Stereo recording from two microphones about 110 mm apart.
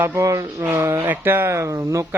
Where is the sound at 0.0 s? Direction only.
25° right (ahead or behind).